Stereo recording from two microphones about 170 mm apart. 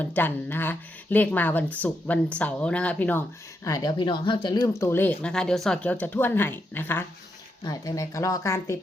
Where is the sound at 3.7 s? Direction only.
20° left (ahead or behind).